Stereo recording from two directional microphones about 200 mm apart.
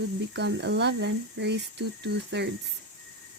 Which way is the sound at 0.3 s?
60° right (ahead or behind).